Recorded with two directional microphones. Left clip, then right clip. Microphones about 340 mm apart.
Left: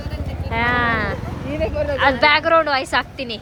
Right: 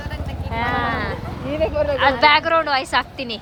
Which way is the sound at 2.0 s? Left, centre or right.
Centre.